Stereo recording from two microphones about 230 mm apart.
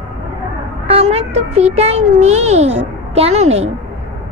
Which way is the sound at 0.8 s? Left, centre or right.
Right.